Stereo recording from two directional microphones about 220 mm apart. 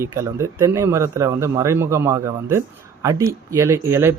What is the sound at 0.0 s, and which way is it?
Speech, 15° right (ahead or behind).